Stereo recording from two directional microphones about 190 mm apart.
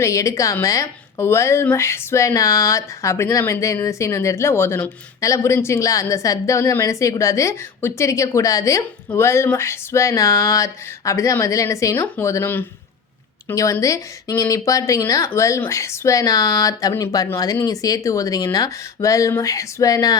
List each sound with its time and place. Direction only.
0.0 s a woman's voice: 15° left (ahead or behind)